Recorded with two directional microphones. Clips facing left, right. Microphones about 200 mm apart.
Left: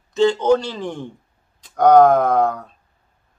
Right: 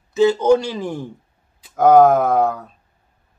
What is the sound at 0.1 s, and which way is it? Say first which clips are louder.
Speech: right 2 dB; 5° right (ahead or behind).